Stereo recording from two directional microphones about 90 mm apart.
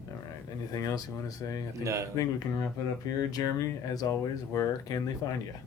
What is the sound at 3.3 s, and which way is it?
Speech, 45° left (ahead or behind).